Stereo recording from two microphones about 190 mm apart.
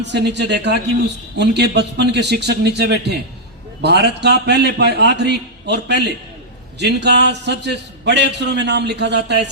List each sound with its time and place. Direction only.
0.0 s a man's voice: 65° right (ahead or behind)